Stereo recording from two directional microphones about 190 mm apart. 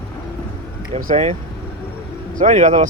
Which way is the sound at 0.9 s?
35° right (ahead or behind).